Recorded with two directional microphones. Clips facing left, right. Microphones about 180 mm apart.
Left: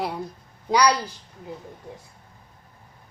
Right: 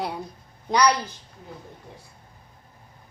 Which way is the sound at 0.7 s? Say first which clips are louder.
Left 1 dB; 10° left (ahead or behind).